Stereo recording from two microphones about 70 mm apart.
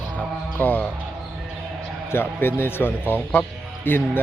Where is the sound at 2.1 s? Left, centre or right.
Left.